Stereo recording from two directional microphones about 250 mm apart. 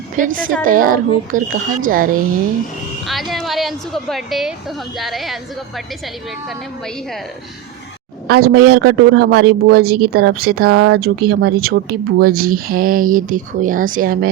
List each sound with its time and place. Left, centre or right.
0.2 s speech: right
3.1 s a woman's voice: centre
8.3 s speech: right
10.7 s speech: right
10.9 s speech: right